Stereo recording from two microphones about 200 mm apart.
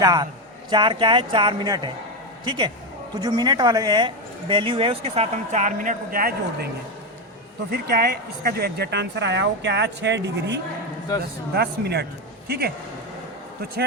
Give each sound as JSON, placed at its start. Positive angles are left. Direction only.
{"t": 0.0, "sound": "a woman's voice", "side_deg": -20}
{"t": 7.7, "sound": "speech", "side_deg": -50}